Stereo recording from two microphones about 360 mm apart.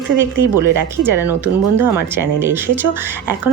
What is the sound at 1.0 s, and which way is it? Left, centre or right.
Speech, centre.